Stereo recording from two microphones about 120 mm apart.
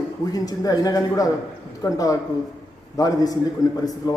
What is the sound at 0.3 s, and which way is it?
A man's voice, 30° left (ahead or behind).